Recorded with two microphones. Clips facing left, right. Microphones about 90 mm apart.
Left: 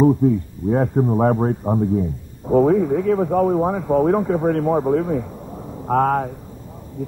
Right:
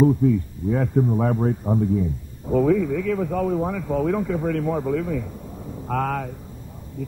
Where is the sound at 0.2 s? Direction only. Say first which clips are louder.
Left 2 dB; 40° left (ahead or behind).